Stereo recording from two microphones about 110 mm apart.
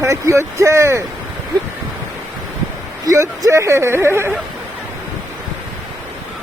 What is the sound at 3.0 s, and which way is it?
A man's voice, 30° right (ahead or behind).